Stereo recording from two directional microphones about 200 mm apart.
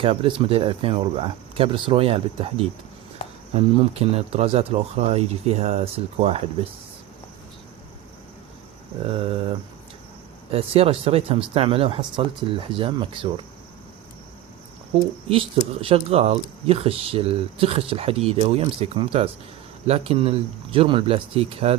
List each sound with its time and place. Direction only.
0.0 s speech: 25° right (ahead or behind)
9.0 s speech: 30° right (ahead or behind)
15.3 s speech: 25° right (ahead or behind)